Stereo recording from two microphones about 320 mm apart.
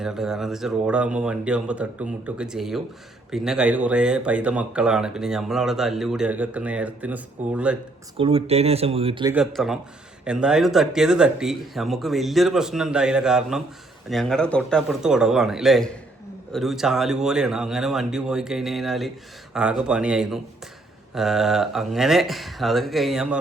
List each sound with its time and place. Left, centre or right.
0.0 s speech: centre
8.2 s speech: centre
9.3 s speech: centre